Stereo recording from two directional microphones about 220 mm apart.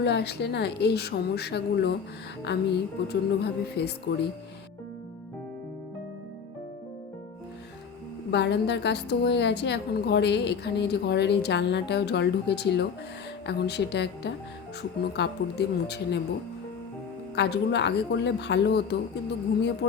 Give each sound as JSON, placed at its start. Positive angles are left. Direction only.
{"t": 0.0, "sound": "a woman's voice", "side_deg": 50}
{"t": 8.3, "sound": "a woman's voice", "side_deg": 50}
{"t": 17.3, "sound": "a woman's voice", "side_deg": 50}